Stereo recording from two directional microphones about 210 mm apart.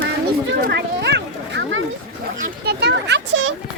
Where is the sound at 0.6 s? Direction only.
55° right (ahead or behind).